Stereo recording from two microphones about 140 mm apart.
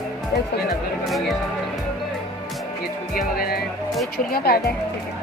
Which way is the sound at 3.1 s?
90° left.